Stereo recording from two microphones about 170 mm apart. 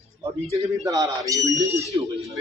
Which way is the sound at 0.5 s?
20° right (ahead or behind).